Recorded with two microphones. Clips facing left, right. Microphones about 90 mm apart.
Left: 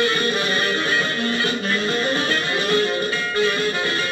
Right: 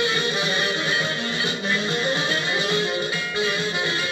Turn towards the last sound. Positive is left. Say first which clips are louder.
# left 4 dB
turn(degrees=50)  # may be behind; listen again after turning